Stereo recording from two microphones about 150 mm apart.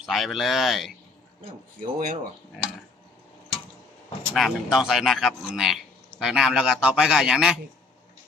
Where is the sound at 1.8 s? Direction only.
65° right (ahead or behind).